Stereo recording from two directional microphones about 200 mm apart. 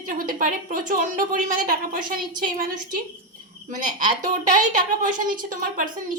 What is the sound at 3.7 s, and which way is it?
A woman's voice, 40° right (ahead or behind).